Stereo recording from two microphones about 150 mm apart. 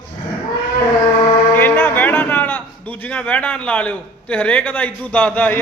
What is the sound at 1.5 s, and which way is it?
Music, 15° left (ahead or behind).